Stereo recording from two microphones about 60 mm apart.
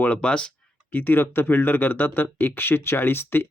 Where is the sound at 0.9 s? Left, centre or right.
Left.